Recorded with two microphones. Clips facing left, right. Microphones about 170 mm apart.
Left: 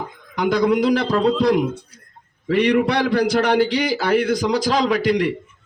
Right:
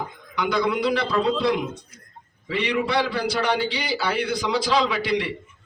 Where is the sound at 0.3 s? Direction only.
45° left (ahead or behind).